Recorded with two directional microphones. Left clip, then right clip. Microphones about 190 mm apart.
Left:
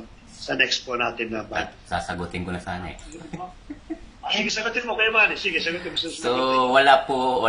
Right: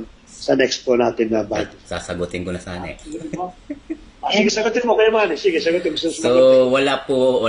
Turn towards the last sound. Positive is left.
turn(degrees=0)  # may be behind; listen again after turning